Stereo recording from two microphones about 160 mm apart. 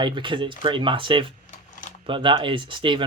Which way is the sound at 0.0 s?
30° right (ahead or behind).